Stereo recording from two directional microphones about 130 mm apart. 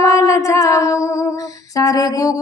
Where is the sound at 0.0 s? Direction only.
25° left (ahead or behind).